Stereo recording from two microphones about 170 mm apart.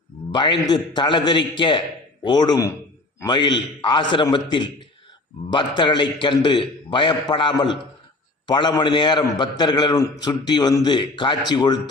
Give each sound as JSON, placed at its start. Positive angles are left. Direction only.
{"t": 0.3, "sound": "a man's voice", "side_deg": 30}